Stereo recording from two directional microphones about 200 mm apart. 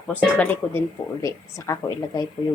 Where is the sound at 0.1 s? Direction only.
10° left (ahead or behind).